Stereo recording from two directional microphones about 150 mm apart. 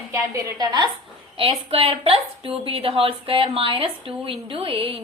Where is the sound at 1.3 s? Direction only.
40° right (ahead or behind).